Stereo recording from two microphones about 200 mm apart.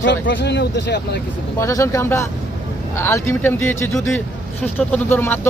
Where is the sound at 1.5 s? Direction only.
15° left (ahead or behind).